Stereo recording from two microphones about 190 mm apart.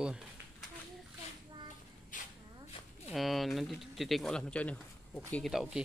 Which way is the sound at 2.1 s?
45° left (ahead or behind).